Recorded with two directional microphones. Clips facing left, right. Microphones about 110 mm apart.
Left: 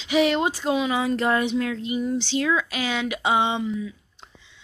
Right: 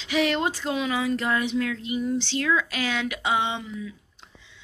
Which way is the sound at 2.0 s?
15° left (ahead or behind).